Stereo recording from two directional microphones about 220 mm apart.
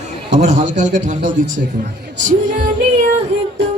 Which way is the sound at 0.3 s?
30° right (ahead or behind).